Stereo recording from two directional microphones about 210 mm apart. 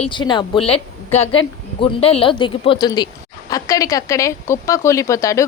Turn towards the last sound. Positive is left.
turn(degrees=15)  # may be behind; listen again after turning